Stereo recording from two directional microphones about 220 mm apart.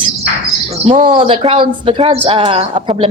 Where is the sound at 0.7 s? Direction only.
30° right (ahead or behind).